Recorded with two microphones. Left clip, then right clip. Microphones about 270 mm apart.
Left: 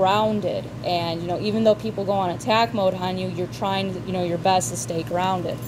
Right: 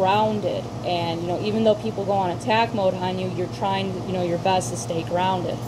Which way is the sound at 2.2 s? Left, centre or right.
Left.